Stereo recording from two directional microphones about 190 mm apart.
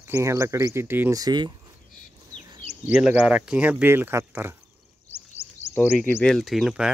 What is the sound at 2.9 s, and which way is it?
Speech, 5° right (ahead or behind).